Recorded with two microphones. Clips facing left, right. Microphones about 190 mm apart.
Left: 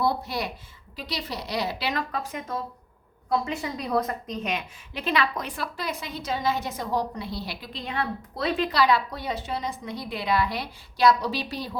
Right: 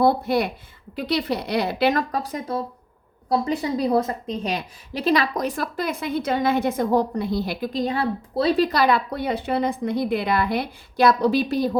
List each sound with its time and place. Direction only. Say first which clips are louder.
0.0 s a woman's voice: right 8 dB; 55° right (ahead or behind)